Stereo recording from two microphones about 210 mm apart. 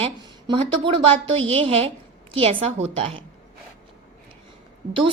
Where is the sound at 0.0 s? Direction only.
20° right (ahead or behind).